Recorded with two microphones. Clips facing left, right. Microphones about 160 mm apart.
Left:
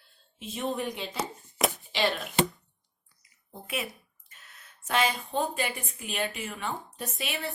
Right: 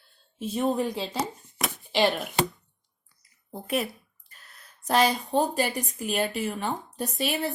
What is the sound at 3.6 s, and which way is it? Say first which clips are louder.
A woman's voice: right 7 dB; 40° right (ahead or behind).